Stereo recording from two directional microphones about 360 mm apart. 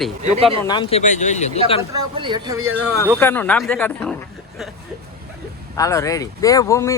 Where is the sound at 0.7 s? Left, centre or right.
Centre.